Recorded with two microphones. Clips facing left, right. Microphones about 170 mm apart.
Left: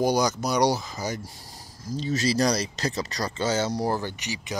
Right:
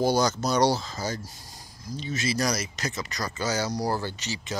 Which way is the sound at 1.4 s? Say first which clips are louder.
Left 2 dB; 30° left (ahead or behind).